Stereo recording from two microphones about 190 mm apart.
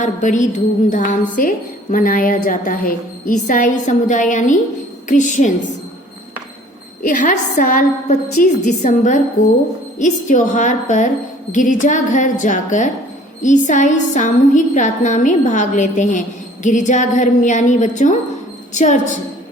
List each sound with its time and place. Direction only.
0.0 s a woman's voice: 40° left (ahead or behind)
7.0 s a woman's voice: 40° left (ahead or behind)